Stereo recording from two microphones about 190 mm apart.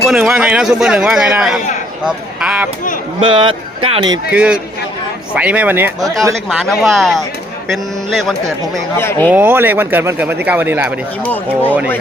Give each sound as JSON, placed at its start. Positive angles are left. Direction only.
{"t": 0.1, "sound": "a man's voice", "side_deg": -5}
{"t": 3.2, "sound": "speech", "side_deg": -25}
{"t": 4.3, "sound": "a man's voice", "side_deg": -5}
{"t": 9.0, "sound": "speech", "side_deg": 10}
{"t": 9.3, "sound": "speech", "side_deg": -10}